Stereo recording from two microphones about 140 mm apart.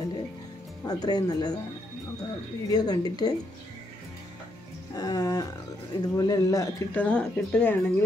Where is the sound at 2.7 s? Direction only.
30° left (ahead or behind).